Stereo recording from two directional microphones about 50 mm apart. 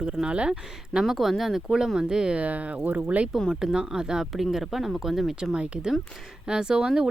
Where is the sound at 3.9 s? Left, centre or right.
Centre.